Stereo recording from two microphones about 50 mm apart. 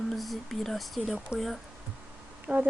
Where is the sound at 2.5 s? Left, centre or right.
Right.